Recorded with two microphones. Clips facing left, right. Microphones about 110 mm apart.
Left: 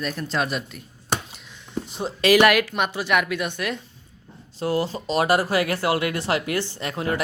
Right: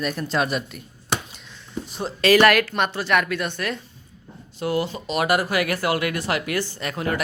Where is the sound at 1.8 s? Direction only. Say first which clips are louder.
Right 1 dB; 20° left (ahead or behind).